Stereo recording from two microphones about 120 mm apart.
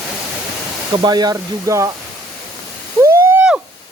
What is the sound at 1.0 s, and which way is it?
Speech, 35° right (ahead or behind).